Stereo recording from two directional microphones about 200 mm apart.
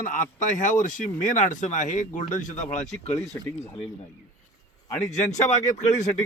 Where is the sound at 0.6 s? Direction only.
40° left (ahead or behind).